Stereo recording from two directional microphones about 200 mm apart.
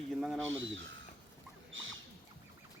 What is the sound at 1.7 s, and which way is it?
Rodents, 75° right (ahead or behind).